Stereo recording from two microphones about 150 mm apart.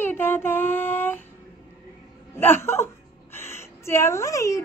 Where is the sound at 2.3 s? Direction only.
15° left (ahead or behind).